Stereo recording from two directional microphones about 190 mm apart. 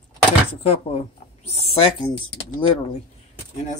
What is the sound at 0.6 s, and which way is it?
Speech, 30° left (ahead or behind).